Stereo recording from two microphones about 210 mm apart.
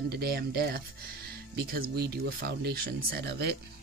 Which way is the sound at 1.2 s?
50° right (ahead or behind).